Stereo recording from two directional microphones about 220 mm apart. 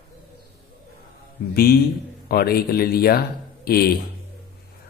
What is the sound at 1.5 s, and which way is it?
Speech, 45° left (ahead or behind).